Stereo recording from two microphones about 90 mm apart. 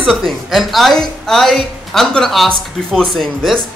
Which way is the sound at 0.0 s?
Centre (ahead or behind).